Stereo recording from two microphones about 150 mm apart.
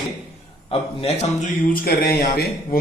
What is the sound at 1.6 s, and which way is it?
Speech, 80° left.